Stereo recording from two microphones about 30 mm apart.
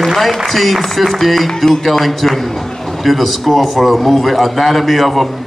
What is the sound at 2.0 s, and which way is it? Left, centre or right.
A man's voice, centre.